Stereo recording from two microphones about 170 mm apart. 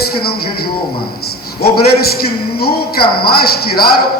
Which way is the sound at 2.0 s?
65° left (ahead or behind).